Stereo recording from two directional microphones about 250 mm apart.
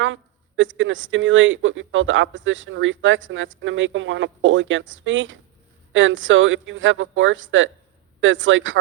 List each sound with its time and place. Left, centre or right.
0.0 s speech: right